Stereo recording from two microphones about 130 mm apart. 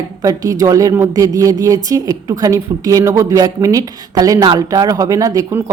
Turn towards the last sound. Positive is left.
turn(degrees=-25)  # may be behind; listen again after turning